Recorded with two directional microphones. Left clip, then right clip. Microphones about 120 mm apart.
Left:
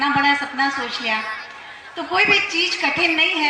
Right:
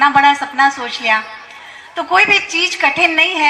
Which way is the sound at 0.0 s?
20° right (ahead or behind).